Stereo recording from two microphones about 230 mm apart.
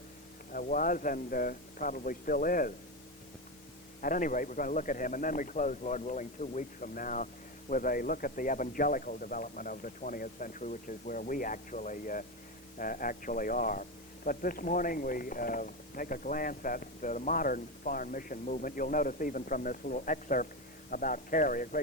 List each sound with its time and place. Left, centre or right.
0.5 s speech: left
4.0 s speech: left